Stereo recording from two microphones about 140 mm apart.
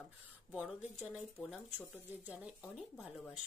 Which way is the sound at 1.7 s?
10° right (ahead or behind).